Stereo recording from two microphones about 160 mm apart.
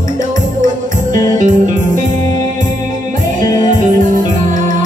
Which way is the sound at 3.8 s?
55° right (ahead or behind).